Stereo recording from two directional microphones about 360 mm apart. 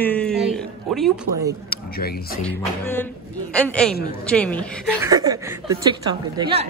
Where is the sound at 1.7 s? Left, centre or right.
Left.